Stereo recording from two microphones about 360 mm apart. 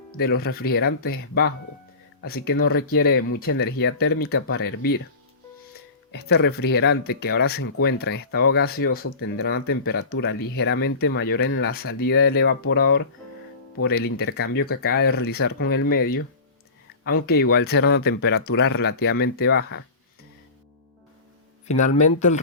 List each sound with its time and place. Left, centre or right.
0.2 s speech: left
6.1 s speech: left
21.7 s speech: centre